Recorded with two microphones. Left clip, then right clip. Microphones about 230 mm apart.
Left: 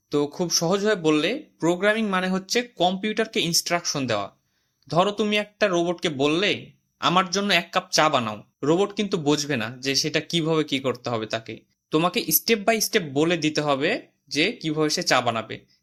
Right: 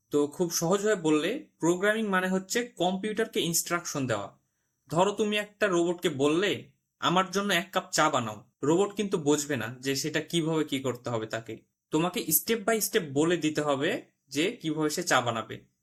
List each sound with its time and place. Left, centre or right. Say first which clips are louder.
0.1 s speech: left 4 dB; left